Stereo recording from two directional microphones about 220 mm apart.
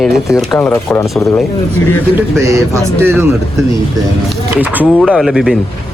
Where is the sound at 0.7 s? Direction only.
15° left (ahead or behind).